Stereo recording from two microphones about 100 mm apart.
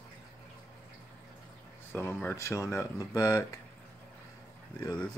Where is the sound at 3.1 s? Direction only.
45° left (ahead or behind).